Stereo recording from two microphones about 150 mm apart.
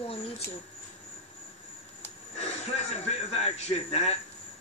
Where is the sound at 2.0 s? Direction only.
45° left (ahead or behind).